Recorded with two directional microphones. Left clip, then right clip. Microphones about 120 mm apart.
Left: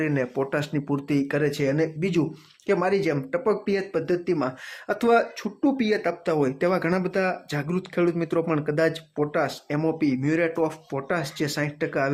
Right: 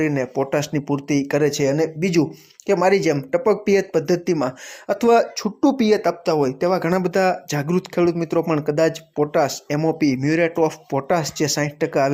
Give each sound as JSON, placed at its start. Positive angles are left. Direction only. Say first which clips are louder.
{"t": 0.0, "sound": "speech", "louder": "right 4 dB", "side_deg": -15}
{"t": 0.5, "sound": "speech", "louder": "right 5 dB", "side_deg": -25}
{"t": 3.7, "sound": "speech", "louder": "right 7 dB", "side_deg": -35}
{"t": 4.4, "sound": "speech", "louder": "right 4 dB", "side_deg": -20}
{"t": 5.5, "sound": "speech", "louder": "right 6 dB", "side_deg": -45}
{"t": 6.9, "sound": "speech", "louder": "right 6 dB", "side_deg": -40}
{"t": 8.0, "sound": "speech", "louder": "right 3 dB", "side_deg": -20}
{"t": 9.3, "sound": "speech", "louder": "right 7 dB", "side_deg": -30}